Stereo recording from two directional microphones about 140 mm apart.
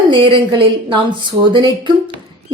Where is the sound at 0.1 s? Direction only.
35° right (ahead or behind).